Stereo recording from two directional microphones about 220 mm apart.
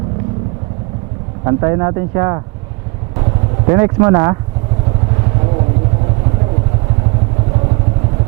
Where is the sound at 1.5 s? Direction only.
15° right (ahead or behind).